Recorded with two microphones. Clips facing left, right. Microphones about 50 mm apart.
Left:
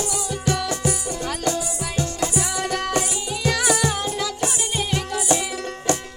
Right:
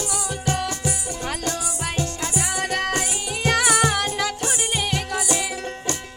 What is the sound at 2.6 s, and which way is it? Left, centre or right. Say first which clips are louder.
Music: even; right.